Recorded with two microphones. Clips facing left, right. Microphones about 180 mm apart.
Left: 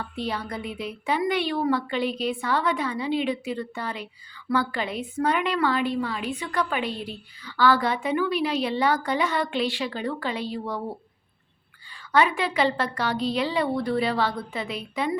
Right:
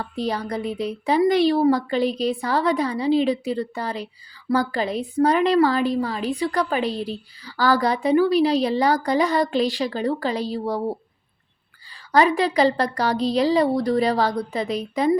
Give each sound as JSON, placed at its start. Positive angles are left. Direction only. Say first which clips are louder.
{"t": 0.0, "sound": "a woman's voice", "louder": "right 5 dB", "side_deg": -40}
{"t": 12.1, "sound": "a woman's voice", "louder": "right 5 dB", "side_deg": -40}